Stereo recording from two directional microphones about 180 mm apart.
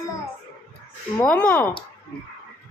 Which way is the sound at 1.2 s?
5° left (ahead or behind).